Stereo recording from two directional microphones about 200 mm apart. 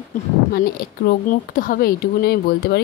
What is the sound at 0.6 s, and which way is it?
Speech, 50° left (ahead or behind).